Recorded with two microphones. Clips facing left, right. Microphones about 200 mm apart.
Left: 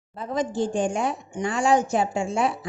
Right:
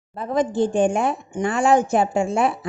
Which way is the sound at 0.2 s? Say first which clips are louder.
Right 5 dB; 60° right (ahead or behind).